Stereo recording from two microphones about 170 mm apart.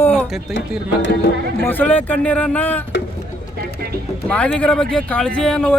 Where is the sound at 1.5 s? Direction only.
10° left (ahead or behind).